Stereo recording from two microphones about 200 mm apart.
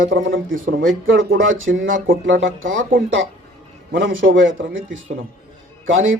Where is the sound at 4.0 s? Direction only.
70° right (ahead or behind).